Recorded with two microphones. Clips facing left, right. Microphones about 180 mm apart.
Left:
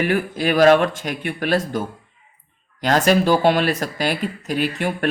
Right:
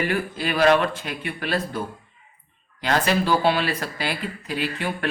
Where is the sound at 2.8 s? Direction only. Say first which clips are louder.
Left 5 dB; 45° left (ahead or behind).